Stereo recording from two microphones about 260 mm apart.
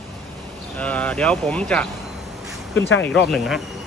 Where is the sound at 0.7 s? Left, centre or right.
Centre.